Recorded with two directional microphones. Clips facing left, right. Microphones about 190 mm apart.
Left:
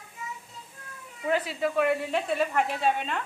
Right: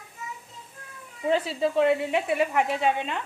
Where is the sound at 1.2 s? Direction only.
25° right (ahead or behind).